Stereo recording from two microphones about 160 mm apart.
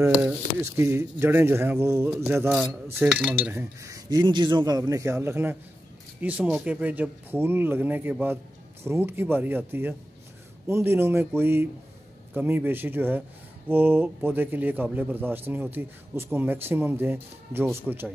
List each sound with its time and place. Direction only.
0.1 s speech: centre (ahead or behind)
0.6 s speech: 15° right (ahead or behind)
2.5 s speech: 5° right (ahead or behind)